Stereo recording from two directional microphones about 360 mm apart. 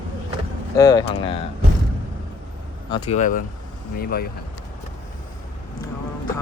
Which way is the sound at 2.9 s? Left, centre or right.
Centre.